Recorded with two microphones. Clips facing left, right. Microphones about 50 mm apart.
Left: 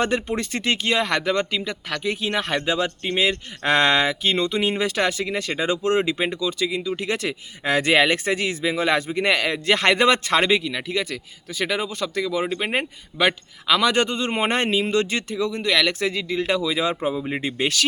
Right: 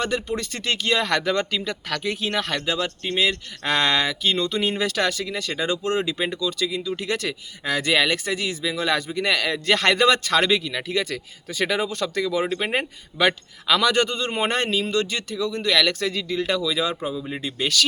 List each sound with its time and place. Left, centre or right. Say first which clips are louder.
0.0 s speech: left 2 dB; left; by 2.4 s centre
2.4 s speech: left 2 dB; left
7.7 s speech: left 3 dB; left
10.5 s speech: left 1 dB; centre; by 15.6 s left
15.6 s speech: even; centre; by 17.8 s left